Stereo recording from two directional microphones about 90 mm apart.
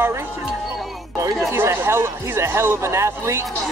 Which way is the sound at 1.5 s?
25° right (ahead or behind).